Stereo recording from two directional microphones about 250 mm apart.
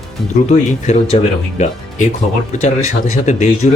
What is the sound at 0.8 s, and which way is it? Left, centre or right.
Speech, left.